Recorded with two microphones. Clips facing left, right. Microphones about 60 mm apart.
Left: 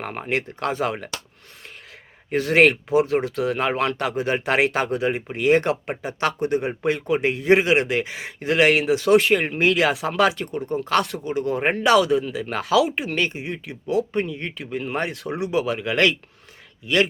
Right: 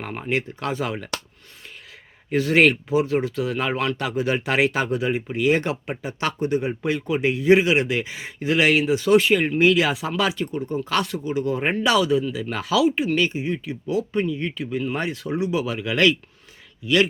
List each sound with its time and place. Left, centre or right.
0.0 s speech: left
2.3 s speech: left